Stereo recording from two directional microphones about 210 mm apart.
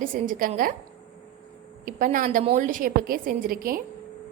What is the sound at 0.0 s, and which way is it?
Speech, 40° right (ahead or behind).